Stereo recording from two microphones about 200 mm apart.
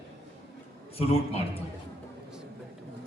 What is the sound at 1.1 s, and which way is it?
Speech, 30° left (ahead or behind).